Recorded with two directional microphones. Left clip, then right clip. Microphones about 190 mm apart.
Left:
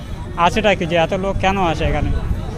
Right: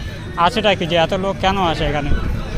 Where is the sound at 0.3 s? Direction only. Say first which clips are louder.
Even; 15° left (ahead or behind).